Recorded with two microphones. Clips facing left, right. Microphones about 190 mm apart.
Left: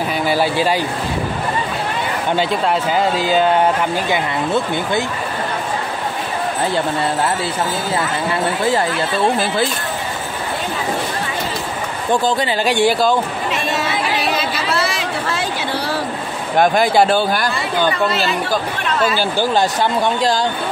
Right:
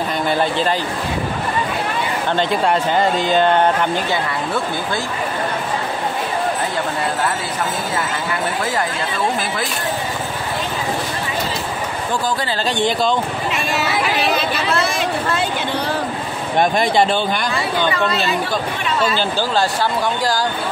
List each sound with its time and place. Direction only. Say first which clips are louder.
0.3 s speech: left 2 dB; 10° left (ahead or behind)
2.3 s speech: even; centre (ahead or behind)
12.6 s speech: left 3 dB; 10° left (ahead or behind)
16.5 s speech: left 2 dB; centre (ahead or behind)
19.3 s speech: left 2 dB; 20° left (ahead or behind)